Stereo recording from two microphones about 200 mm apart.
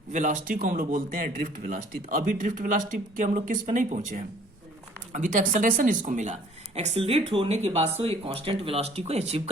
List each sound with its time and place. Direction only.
0.1 s a woman's voice: 40° right (ahead or behind)